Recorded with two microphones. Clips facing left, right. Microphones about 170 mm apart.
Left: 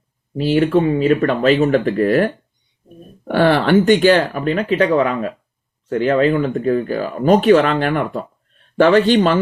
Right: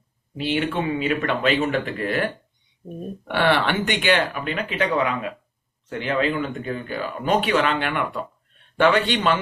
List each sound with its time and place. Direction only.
0.3 s speech: 40° left (ahead or behind)